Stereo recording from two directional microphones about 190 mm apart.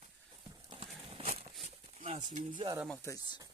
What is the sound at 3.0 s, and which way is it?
Speech, 15° left (ahead or behind).